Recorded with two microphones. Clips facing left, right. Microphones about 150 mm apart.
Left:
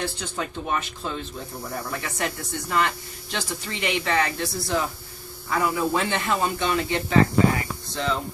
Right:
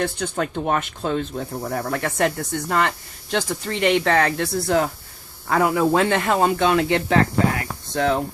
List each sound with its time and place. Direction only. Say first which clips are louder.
0.0 s speech: right 6 dB; 55° right (ahead or behind)